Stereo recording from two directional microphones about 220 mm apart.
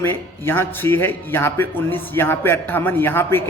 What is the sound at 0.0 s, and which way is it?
A man's voice, 10° left (ahead or behind).